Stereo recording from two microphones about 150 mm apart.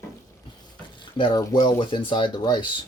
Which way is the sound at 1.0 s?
30° left (ahead or behind).